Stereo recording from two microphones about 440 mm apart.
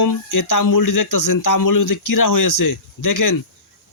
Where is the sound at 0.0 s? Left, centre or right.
Left.